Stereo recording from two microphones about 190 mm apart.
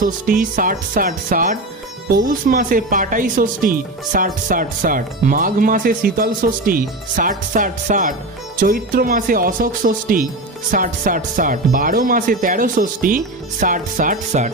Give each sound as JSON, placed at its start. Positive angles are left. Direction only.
{"t": 0.0, "sound": "speech", "side_deg": -45}